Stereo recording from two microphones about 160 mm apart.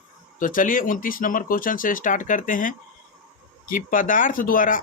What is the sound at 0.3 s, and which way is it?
Speech, 55° left (ahead or behind).